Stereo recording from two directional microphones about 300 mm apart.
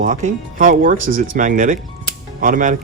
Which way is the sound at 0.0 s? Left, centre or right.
Right.